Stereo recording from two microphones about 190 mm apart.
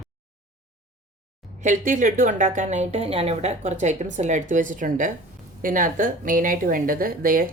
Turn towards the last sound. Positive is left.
turn(degrees=-50)  # may be behind; listen again after turning